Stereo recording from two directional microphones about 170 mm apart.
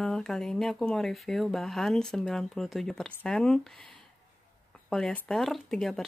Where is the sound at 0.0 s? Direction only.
5° left (ahead or behind).